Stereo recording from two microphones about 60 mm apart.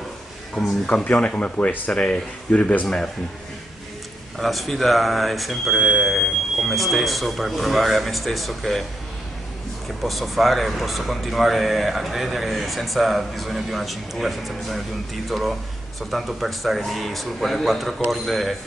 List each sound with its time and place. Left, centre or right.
0.6 s speech: centre
1.0 s speech: centre
4.4 s speech: centre
10.0 s speech: centre